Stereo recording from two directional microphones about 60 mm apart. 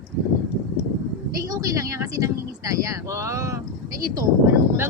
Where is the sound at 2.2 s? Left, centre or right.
Right.